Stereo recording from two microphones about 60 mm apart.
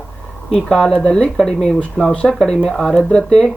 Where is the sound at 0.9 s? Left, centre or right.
Centre.